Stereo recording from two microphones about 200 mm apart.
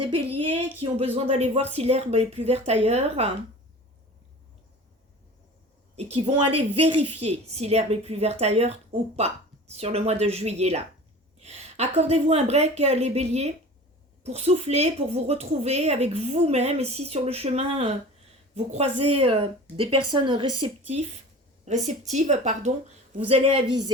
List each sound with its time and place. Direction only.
0.1 s speech: 25° right (ahead or behind)
6.0 s a woman's voice: 30° right (ahead or behind)